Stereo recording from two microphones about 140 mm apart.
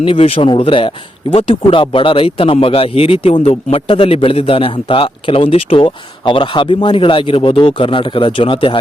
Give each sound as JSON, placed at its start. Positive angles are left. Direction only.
{"t": 0.0, "sound": "speech", "side_deg": 40}